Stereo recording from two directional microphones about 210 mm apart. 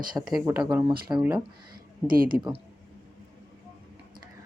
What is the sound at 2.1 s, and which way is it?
Speech, 45° right (ahead or behind).